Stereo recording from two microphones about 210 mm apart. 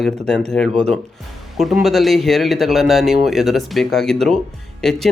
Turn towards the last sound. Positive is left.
turn(degrees=0)  # may be behind; listen again after turning